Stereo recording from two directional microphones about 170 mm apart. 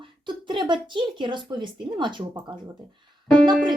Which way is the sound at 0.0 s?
30° right (ahead or behind).